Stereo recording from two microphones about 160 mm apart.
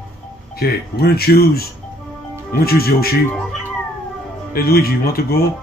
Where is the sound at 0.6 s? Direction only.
75° left (ahead or behind).